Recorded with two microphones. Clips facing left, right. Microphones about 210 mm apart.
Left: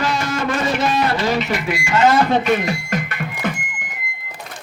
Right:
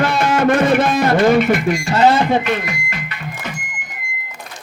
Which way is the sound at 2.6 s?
45° left (ahead or behind).